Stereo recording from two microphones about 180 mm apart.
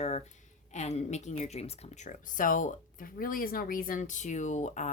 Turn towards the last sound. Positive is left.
turn(degrees=40)  # may be behind; listen again after turning